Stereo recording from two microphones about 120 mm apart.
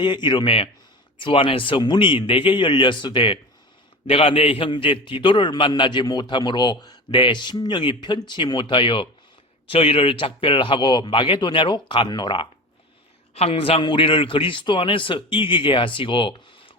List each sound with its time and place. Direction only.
0.0 s a man's voice: 40° left (ahead or behind)
13.3 s a man's voice: 55° left (ahead or behind)